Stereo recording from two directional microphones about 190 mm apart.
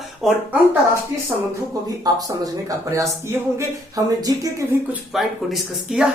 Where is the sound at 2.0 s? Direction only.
20° right (ahead or behind).